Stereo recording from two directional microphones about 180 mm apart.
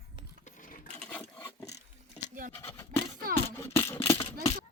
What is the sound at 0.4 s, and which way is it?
Sewing machine, 45° left (ahead or behind).